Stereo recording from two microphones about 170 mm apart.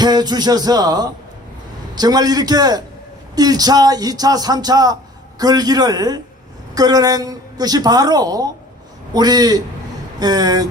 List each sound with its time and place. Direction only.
0.0 s music: 25° right (ahead or behind)
2.0 s a woman's voice: 25° right (ahead or behind)